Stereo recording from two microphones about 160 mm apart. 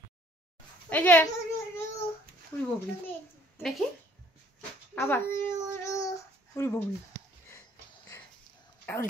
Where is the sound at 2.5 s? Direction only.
15° left (ahead or behind).